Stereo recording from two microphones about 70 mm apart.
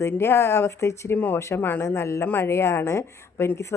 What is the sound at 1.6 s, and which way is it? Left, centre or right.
Speech, left.